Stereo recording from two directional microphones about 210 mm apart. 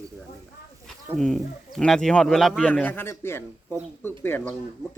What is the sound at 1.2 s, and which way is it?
Speech, 5° left (ahead or behind).